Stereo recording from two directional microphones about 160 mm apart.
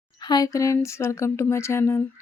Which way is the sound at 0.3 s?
20° left (ahead or behind).